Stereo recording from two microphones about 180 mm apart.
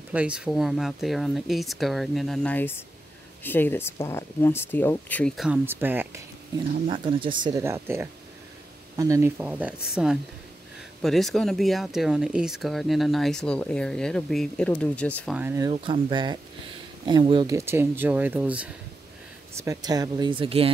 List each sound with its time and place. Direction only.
0.1 s speech: 5° right (ahead or behind)
5.7 s speech: 10° right (ahead or behind)
6.9 s speech: 30° right (ahead or behind)
7.4 s speech: 15° right (ahead or behind); by 15.3 s 5° left (ahead or behind)
15.3 s speech: 15° right (ahead or behind)
15.7 s speech: 25° right (ahead or behind)
17.6 s speech: 15° right (ahead or behind)
19.5 s speech: 20° right (ahead or behind)